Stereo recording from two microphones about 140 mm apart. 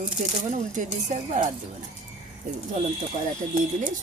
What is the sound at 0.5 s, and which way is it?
Speech, 60° right (ahead or behind).